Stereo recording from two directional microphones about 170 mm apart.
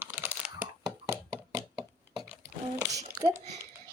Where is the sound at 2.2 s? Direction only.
10° right (ahead or behind).